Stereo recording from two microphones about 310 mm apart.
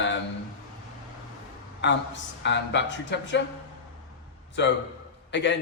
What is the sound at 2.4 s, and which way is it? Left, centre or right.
A woman's voice, left.